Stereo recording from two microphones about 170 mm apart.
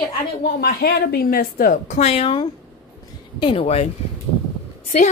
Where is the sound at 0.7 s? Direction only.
65° left (ahead or behind); by 3.8 s 35° left (ahead or behind).